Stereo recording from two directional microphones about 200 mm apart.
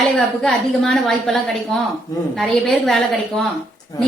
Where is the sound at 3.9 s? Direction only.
20° left (ahead or behind).